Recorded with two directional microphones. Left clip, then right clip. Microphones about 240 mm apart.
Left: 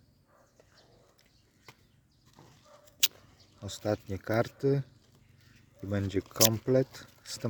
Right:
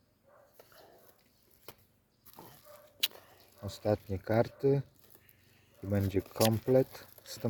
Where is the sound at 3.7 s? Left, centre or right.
Centre.